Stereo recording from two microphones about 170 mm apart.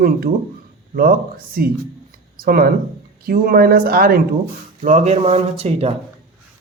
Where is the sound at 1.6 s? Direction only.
55° right (ahead or behind).